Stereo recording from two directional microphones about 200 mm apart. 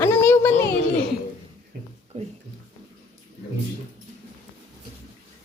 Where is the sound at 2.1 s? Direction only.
35° right (ahead or behind).